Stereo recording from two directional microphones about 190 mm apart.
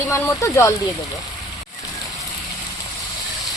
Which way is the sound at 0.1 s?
15° left (ahead or behind).